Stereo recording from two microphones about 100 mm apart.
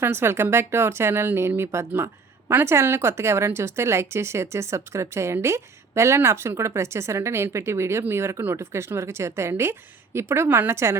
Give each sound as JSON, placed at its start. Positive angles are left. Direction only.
{"t": 0.0, "sound": "speech", "side_deg": -25}